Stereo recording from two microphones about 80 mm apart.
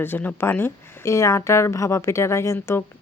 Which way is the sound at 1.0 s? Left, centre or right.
Left.